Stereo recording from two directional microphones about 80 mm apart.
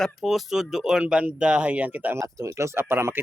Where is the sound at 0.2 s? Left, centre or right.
Centre; by 2.1 s right.